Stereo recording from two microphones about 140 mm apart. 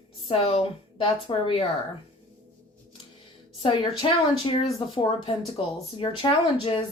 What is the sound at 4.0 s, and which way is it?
Speech, 35° left (ahead or behind).